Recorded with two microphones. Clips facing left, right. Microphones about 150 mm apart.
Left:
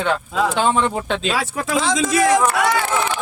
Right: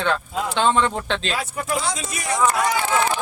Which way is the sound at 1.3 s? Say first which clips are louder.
Left 4 dB; 90° left.